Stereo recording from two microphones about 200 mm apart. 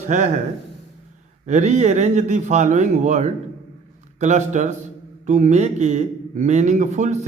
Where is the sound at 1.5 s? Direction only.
35° right (ahead or behind).